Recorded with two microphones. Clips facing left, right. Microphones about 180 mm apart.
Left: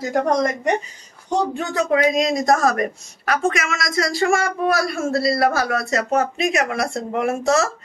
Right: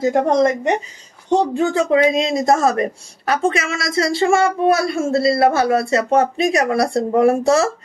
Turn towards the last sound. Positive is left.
turn(degrees=-30)  # may be behind; listen again after turning